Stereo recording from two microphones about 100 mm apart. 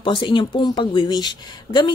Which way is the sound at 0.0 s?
55° left (ahead or behind).